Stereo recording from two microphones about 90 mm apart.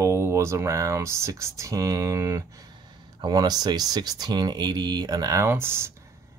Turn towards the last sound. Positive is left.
turn(degrees=-30)  # may be behind; listen again after turning